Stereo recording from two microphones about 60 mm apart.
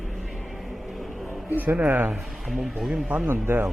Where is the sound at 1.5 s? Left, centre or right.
Right.